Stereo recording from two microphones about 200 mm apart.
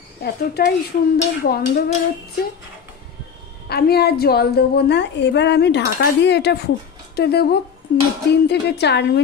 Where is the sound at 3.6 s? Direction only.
55° left (ahead or behind).